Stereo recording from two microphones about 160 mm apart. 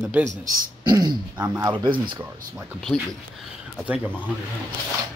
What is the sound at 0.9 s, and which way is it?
Speech, 25° right (ahead or behind).